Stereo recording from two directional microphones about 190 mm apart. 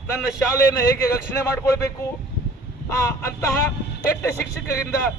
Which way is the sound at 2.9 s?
15° left (ahead or behind).